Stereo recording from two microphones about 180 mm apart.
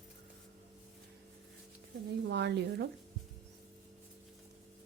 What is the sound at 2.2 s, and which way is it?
Speech, 75° right (ahead or behind).